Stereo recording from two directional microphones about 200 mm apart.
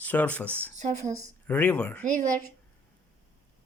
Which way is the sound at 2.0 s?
40° right (ahead or behind).